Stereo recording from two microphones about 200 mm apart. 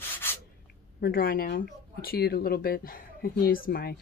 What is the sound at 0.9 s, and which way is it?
Speech, 50° left (ahead or behind).